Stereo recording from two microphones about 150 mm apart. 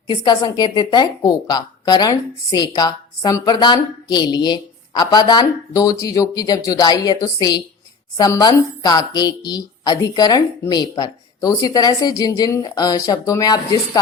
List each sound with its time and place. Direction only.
0.1 s a woman's voice: 30° left (ahead or behind)